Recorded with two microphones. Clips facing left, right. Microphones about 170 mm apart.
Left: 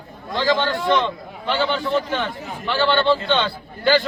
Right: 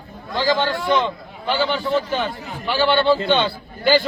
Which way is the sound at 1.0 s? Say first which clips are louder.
Even; 10° right (ahead or behind).